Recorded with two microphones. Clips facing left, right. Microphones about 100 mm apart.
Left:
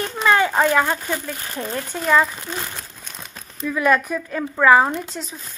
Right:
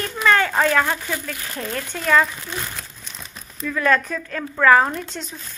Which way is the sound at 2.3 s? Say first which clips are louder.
Left 1 dB; 25° left (ahead or behind).